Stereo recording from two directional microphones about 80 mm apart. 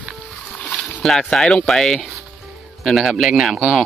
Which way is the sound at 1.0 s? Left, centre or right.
Centre.